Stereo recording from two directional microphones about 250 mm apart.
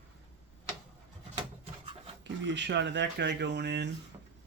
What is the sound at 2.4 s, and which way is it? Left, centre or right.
Speech, right.